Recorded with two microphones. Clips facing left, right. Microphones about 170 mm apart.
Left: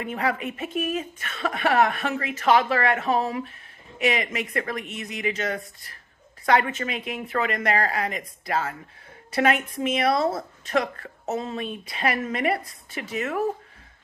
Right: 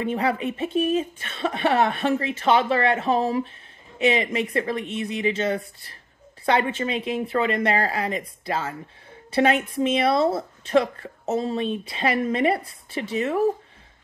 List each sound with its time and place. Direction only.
0.0 s a woman's voice: 30° right (ahead or behind)